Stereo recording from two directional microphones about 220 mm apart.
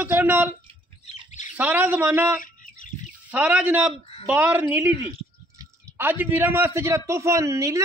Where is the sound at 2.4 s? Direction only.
40° left (ahead or behind).